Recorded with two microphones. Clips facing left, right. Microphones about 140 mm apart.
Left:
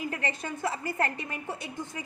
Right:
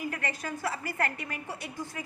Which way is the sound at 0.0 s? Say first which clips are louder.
Left 1 dB; 20° left (ahead or behind).